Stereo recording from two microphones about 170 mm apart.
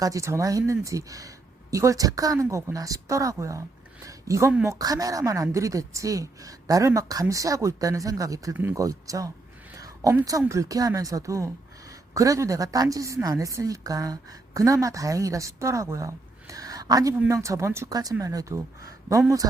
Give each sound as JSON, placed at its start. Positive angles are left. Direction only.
{"t": 0.0, "sound": "a woman's voice", "side_deg": -20}
{"t": 9.7, "sound": "a sound", "side_deg": -20}
{"t": 10.4, "sound": "a woman's voice", "side_deg": -20}